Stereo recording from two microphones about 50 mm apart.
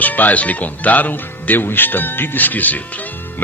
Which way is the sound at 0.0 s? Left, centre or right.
Left.